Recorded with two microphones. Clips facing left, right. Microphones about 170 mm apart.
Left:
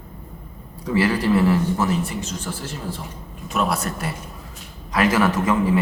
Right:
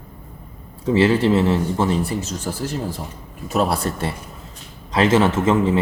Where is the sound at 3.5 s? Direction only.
35° right (ahead or behind).